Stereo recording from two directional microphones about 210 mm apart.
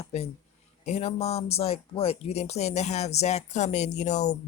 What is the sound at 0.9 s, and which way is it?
Speech, 30° left (ahead or behind).